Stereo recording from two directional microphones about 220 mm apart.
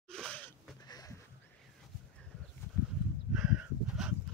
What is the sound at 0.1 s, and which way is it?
Wheeze, 5° left (ahead or behind).